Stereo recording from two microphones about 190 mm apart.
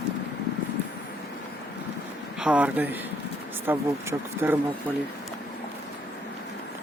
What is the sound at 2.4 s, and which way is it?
Speech, 5° right (ahead or behind).